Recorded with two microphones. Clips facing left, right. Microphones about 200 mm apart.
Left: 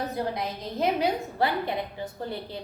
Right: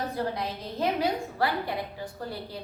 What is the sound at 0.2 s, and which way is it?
A woman's voice, 15° left (ahead or behind).